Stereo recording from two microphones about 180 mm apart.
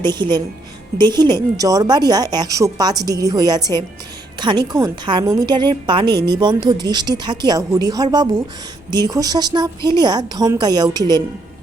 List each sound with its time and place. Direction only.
0.0 s a woman's voice: 25° right (ahead or behind)